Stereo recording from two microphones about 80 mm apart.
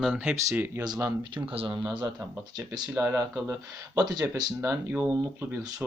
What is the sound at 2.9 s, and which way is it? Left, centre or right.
Speech, right.